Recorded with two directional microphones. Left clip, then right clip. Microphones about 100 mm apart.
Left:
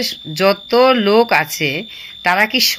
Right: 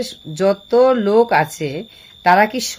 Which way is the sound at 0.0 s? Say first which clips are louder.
Left 3 dB; 40° right (ahead or behind).